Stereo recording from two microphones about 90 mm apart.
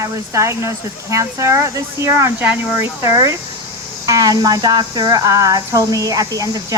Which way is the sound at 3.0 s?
35° right (ahead or behind).